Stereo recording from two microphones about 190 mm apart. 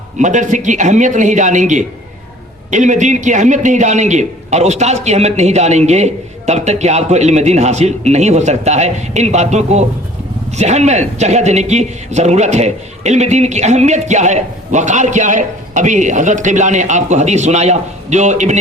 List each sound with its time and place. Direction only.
0.2 s a man's voice: 40° right (ahead or behind)